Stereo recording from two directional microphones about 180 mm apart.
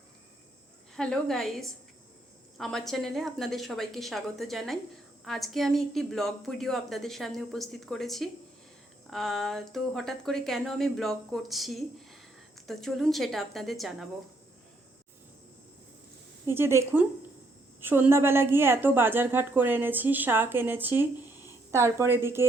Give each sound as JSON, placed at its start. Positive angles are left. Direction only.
{"t": 0.9, "sound": "speech", "side_deg": 5}
{"t": 16.5, "sound": "a woman's voice", "side_deg": -15}